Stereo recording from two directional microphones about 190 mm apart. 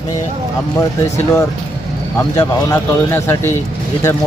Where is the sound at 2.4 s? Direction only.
15° left (ahead or behind).